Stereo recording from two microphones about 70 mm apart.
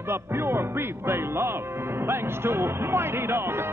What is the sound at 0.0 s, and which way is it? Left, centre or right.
Speech, right.